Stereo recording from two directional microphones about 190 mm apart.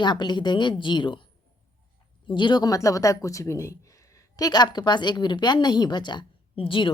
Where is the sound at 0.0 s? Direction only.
25° left (ahead or behind).